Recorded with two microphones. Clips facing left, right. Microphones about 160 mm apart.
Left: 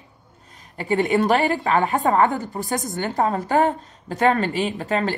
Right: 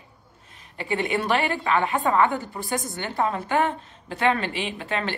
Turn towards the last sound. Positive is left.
turn(degrees=40)  # may be behind; listen again after turning